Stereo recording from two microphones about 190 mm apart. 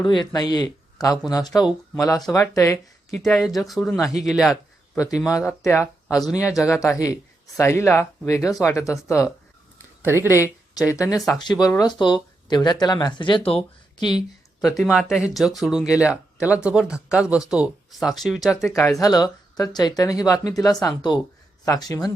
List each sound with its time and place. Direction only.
0.1 s speech: 25° left (ahead or behind)
3.2 s speech: centre (ahead or behind)
5.5 s speech: 15° left (ahead or behind)
14.8 s speech: 5° right (ahead or behind)
18.6 s speech: 15° left (ahead or behind)